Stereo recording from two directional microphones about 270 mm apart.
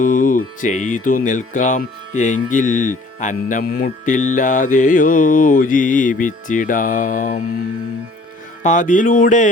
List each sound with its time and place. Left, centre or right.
0.0 s music: left
8.6 s music: left